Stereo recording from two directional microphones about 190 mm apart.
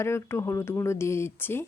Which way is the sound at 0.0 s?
15° left (ahead or behind).